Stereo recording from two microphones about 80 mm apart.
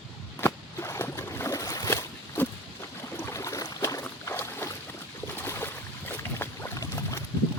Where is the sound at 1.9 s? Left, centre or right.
Left.